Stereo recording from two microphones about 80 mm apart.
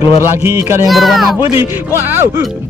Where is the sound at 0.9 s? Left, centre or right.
Centre.